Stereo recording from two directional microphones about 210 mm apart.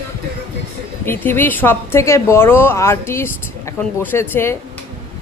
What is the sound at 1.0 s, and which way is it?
A woman's voice, 10° left (ahead or behind).